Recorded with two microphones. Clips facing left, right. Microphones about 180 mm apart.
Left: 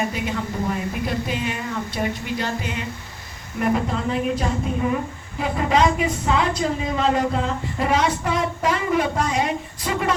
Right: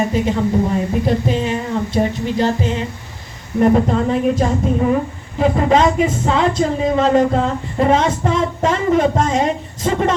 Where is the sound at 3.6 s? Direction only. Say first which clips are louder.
Right 8 dB; 40° right (ahead or behind).